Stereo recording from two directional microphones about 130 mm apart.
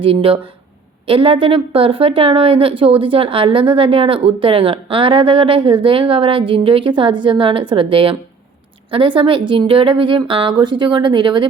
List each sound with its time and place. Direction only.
0.0 s a woman's voice: 45° right (ahead or behind)